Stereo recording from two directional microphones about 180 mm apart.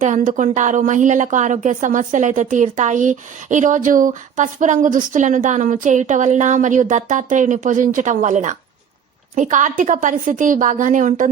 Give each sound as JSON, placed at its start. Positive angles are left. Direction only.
{"t": 0.0, "sound": "a woman's voice", "side_deg": -45}